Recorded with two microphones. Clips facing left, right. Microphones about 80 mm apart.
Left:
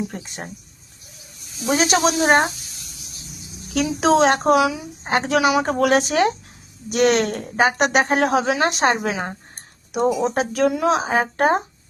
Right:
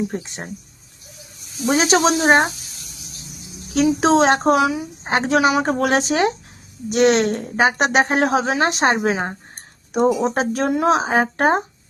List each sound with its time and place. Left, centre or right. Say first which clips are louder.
0.1 s a woman's voice: right 4 dB; right
1.6 s a woman's voice: right 2 dB; right
3.8 s a woman's voice: right 2 dB; right